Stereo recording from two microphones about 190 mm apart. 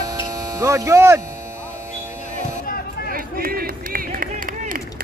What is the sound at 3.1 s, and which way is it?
Run, 50° right (ahead or behind).